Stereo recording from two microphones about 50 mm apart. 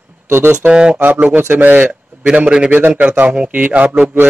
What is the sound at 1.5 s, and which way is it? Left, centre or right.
Speech, right.